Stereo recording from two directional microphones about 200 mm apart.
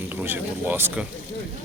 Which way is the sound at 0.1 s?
10° right (ahead or behind).